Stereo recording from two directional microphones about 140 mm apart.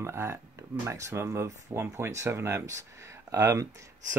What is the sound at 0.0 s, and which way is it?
Speech, 20° right (ahead or behind).